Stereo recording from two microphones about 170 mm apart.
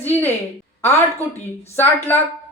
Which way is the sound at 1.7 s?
15° left (ahead or behind).